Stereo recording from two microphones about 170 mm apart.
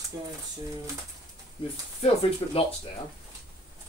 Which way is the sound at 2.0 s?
35° left (ahead or behind).